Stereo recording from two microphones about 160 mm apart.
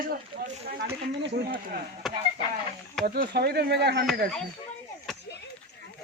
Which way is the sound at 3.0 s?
65° right (ahead or behind).